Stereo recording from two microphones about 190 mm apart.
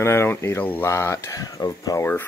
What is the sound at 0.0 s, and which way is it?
Speech, 15° left (ahead or behind).